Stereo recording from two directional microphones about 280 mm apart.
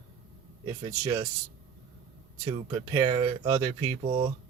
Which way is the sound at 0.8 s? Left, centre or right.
Centre.